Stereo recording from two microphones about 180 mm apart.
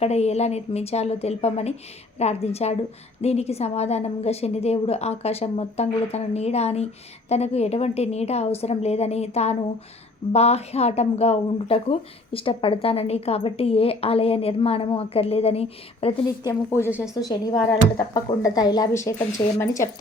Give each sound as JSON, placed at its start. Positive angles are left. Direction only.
{"t": 0.0, "sound": "speech", "side_deg": 35}
{"t": 16.5, "sound": "a woman's voice", "side_deg": 15}